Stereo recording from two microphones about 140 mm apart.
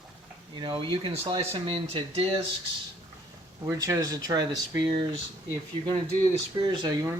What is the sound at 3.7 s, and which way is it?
Speech, 25° right (ahead or behind).